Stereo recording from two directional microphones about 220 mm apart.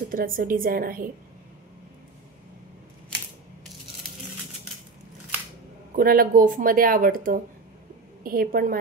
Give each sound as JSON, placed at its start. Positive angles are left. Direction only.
{"t": 0.1, "sound": "speech", "side_deg": -40}
{"t": 5.9, "sound": "speech", "side_deg": -40}